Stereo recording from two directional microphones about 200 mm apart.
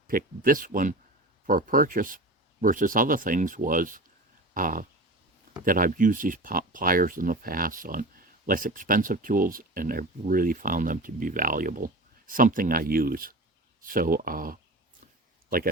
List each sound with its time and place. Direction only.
0.1 s speech: 45° right (ahead or behind)